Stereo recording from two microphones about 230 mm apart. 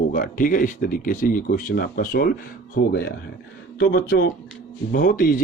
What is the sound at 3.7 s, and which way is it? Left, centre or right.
Speech, left.